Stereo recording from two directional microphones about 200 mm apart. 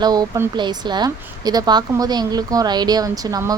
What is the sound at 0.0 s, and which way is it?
A woman's voice, 20° right (ahead or behind).